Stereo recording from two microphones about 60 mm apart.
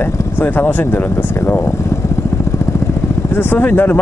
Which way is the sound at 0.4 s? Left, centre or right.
Left.